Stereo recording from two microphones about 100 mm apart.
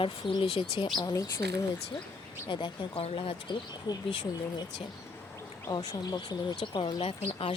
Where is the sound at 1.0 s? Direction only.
35° left (ahead or behind).